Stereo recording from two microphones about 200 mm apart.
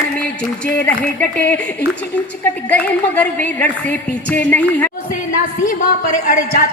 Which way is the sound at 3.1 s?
5° left (ahead or behind).